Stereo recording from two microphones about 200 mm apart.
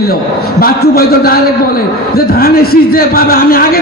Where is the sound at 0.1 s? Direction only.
50° left (ahead or behind).